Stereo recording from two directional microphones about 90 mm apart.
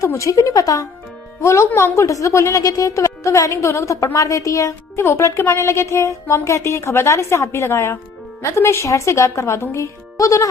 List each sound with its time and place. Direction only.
0.0 s a woman's voice: 35° left (ahead or behind)
1.4 s a woman's voice: 30° left (ahead or behind)